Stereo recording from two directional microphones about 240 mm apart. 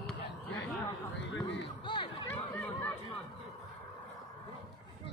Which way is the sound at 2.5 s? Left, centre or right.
Centre.